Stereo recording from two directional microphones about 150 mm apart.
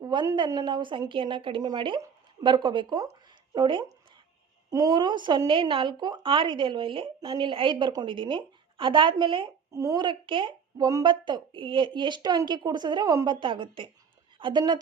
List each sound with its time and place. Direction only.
0.0 s a woman's voice: 25° right (ahead or behind)